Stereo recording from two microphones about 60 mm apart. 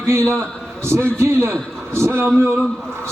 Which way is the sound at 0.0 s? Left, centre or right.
Right.